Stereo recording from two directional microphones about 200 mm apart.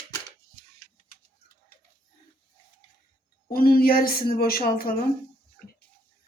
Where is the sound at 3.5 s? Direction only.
50° left (ahead or behind).